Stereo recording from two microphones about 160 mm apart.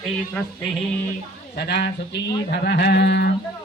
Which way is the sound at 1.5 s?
90° left.